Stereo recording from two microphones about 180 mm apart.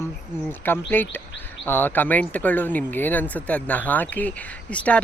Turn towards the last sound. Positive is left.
turn(degrees=5)  # may be behind; listen again after turning